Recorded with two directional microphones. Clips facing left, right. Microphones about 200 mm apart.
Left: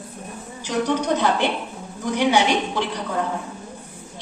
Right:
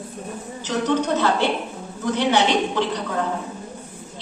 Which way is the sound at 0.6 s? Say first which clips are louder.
Even; 15° left (ahead or behind).